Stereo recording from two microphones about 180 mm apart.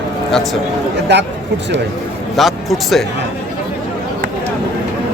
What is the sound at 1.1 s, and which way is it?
Speech, 75° right (ahead or behind).